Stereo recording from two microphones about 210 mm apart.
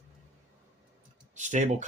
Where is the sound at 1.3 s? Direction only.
35° right (ahead or behind).